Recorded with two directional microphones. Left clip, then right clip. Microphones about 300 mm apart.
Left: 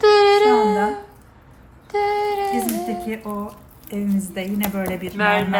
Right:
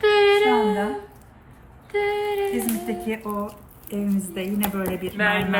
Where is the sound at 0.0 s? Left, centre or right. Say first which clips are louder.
Left 4 dB; centre.